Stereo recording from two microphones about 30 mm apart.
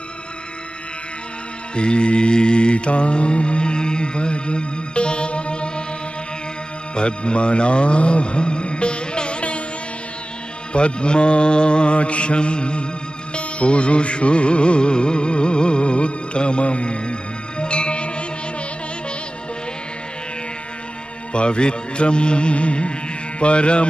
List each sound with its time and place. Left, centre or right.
1.8 s mantra: left
7.0 s music: left
10.7 s mantra: left
13.3 s music: left
21.3 s mantra: left